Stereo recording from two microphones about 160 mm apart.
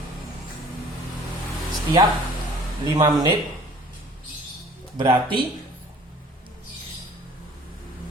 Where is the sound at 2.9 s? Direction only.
25° right (ahead or behind).